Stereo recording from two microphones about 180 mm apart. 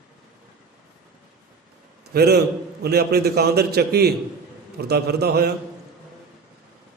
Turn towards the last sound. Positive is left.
turn(degrees=-60)  # may be behind; listen again after turning